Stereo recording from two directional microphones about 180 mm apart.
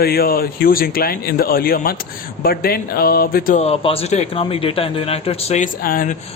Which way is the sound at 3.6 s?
35° left (ahead or behind).